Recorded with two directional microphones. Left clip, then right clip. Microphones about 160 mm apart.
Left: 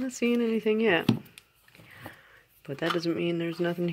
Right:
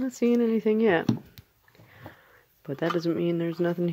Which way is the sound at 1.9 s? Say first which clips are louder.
Left 2 dB; 15° right (ahead or behind).